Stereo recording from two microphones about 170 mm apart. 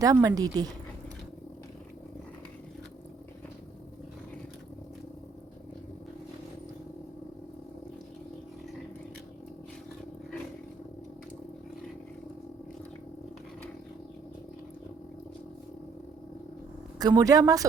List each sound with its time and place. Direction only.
0.0 s speech: 20° right (ahead or behind)
17.0 s speech: 20° right (ahead or behind)